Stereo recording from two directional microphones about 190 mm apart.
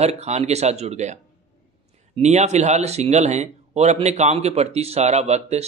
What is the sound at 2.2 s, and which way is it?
Speech, 35° right (ahead or behind).